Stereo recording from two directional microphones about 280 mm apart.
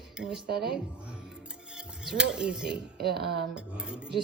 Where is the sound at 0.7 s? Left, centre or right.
Centre.